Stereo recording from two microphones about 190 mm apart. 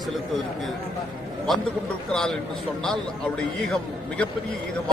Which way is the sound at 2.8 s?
5° left (ahead or behind).